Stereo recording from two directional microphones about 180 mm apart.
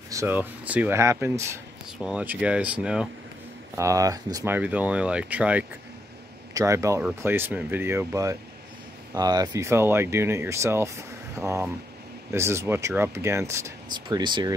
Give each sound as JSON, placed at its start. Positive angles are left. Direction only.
{"t": 0.1, "sound": "speech", "side_deg": -15}
{"t": 2.0, "sound": "speech", "side_deg": -5}
{"t": 3.7, "sound": "speech", "side_deg": -15}
{"t": 4.6, "sound": "speech", "side_deg": -10}